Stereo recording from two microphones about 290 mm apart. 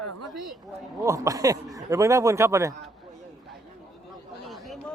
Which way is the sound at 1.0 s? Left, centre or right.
Centre.